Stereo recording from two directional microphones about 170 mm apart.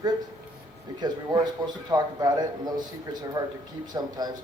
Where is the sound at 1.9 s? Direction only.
20° right (ahead or behind).